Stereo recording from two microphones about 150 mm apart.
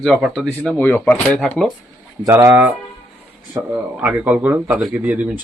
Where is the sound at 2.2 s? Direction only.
20° right (ahead or behind).